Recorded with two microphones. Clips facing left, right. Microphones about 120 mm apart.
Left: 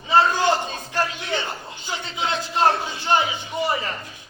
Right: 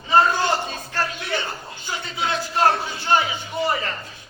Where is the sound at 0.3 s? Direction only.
15° left (ahead or behind).